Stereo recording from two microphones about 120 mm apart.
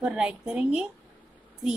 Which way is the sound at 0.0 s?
5° right (ahead or behind).